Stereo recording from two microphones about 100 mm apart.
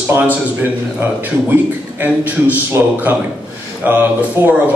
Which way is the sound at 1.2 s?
20° right (ahead or behind).